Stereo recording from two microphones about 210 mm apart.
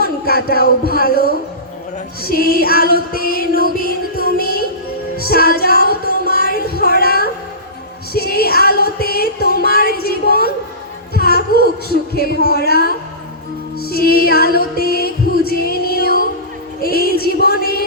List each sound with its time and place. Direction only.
0.0 s speech: 45° left (ahead or behind)
2.6 s music: 45° left (ahead or behind)
6.5 s a sound: 45° left (ahead or behind)
8.1 s music: 45° left (ahead or behind)
11.1 s a sound: 45° left (ahead or behind)
12.1 s speech: 50° left (ahead or behind)
13.8 s music: 45° left (ahead or behind)